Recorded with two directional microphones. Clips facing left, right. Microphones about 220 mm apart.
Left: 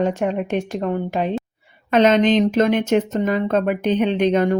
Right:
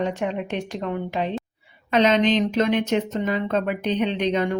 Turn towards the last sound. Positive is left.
turn(degrees=45)  # may be behind; listen again after turning